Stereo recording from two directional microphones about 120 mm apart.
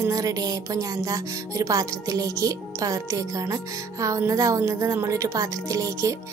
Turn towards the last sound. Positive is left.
turn(degrees=-25)  # may be behind; listen again after turning